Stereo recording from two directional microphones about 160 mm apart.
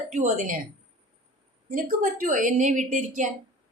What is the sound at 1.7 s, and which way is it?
A woman's voice, 60° right (ahead or behind).